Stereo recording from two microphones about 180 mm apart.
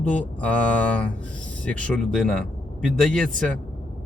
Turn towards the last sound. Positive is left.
turn(degrees=-45)  # may be behind; listen again after turning